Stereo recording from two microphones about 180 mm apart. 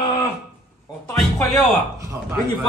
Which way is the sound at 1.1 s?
Centre (ahead or behind).